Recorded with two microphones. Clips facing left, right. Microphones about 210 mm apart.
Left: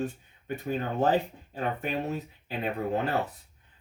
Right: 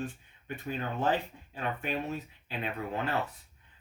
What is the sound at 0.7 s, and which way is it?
Speech, 45° left (ahead or behind).